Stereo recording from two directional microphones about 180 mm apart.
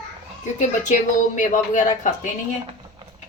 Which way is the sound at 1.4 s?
45° left (ahead or behind).